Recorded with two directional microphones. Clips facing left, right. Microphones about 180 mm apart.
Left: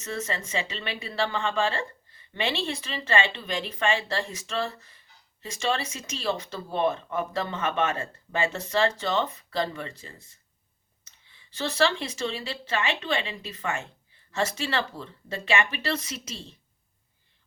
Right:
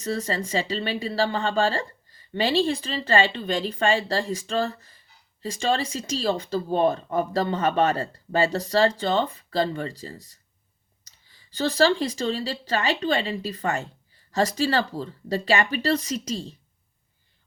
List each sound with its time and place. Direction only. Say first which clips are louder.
0.0 s speech: right 5 dB; 35° right (ahead or behind)